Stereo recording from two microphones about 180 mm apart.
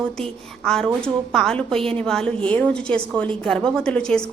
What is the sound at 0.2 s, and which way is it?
A woman's voice, 5° left (ahead or behind).